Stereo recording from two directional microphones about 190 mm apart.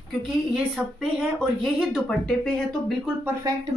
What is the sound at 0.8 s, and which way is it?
Speech, 10° right (ahead or behind).